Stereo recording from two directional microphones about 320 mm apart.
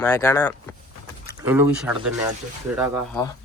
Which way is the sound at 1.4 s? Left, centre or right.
Centre.